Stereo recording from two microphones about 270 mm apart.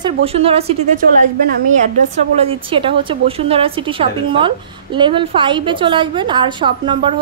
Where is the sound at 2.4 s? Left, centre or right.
Centre.